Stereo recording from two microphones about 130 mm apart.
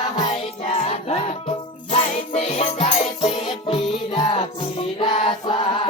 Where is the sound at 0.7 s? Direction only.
55° left (ahead or behind).